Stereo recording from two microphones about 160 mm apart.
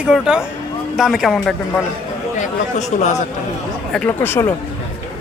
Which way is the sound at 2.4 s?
45° left (ahead or behind).